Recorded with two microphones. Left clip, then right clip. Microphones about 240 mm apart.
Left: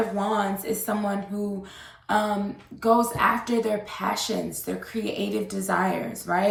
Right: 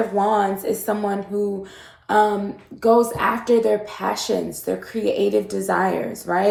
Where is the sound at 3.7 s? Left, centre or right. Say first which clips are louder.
Right 5 dB; centre.